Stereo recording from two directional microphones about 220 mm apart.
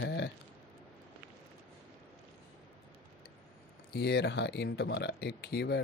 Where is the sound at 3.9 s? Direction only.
50° left (ahead or behind).